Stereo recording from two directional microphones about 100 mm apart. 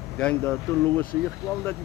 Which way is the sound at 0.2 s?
10° left (ahead or behind).